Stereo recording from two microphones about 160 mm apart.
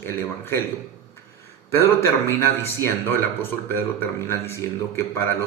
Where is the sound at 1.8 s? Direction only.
15° left (ahead or behind).